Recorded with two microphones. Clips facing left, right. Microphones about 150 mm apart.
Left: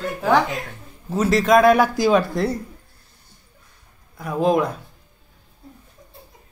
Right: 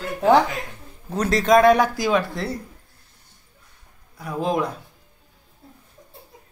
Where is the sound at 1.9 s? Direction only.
35° left (ahead or behind).